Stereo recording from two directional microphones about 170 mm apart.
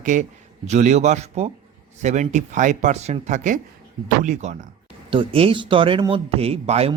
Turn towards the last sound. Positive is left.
turn(degrees=-35)  # may be behind; listen again after turning